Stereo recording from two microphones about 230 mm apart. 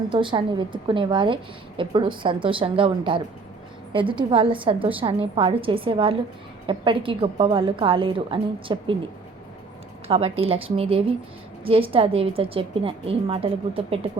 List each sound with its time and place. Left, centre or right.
0.1 s a woman's voice: right
10.1 s a woman's voice: right